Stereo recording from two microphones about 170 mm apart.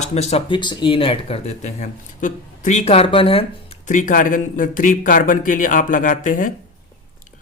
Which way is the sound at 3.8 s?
50° left (ahead or behind).